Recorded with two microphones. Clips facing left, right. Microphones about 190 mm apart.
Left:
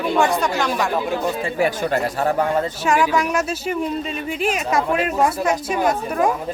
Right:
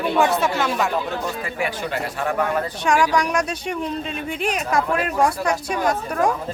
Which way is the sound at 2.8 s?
5° left (ahead or behind).